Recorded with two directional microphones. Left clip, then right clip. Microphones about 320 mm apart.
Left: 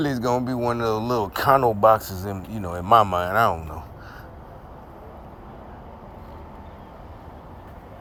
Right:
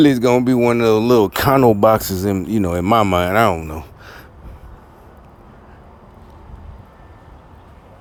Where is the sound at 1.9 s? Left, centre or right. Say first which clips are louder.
Right 4 dB; right.